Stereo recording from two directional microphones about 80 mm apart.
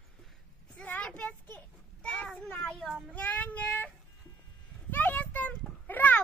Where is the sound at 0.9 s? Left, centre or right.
Centre.